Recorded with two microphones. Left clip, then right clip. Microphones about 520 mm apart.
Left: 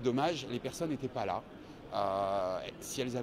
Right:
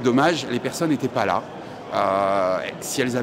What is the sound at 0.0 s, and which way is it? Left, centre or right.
Speech, left.